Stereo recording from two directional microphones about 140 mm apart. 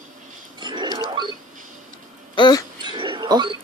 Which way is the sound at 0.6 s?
30° right (ahead or behind).